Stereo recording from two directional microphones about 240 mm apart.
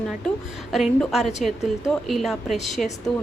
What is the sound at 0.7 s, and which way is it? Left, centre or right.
A woman's voice, centre.